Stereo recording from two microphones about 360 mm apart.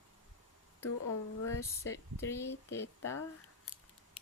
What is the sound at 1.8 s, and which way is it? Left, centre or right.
Speech, centre.